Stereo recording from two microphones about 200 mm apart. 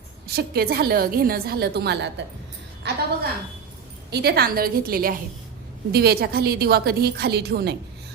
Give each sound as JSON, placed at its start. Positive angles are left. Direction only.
{"t": 0.3, "sound": "a woman's voice", "side_deg": -50}
{"t": 4.1, "sound": "a woman's voice", "side_deg": -50}